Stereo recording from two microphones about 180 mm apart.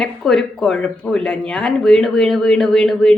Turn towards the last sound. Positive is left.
turn(degrees=5)  # may be behind; listen again after turning